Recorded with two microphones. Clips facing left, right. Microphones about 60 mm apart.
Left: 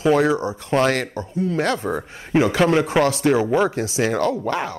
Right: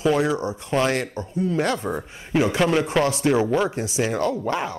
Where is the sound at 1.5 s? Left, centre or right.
Left.